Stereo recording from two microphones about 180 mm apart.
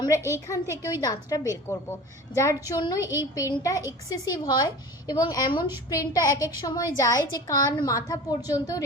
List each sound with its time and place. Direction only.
0.3 s a woman's voice: 15° left (ahead or behind)
3.0 s speech: 15° right (ahead or behind)
3.3 s a woman's voice: 20° left (ahead or behind)